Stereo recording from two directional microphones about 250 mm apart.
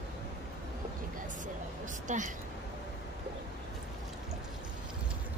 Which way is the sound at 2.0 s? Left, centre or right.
Right.